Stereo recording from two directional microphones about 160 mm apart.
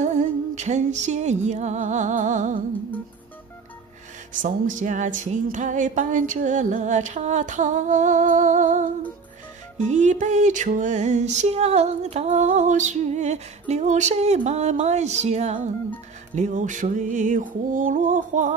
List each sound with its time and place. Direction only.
0.0 s music: 45° right (ahead or behind)
4.3 s music: 55° right (ahead or behind)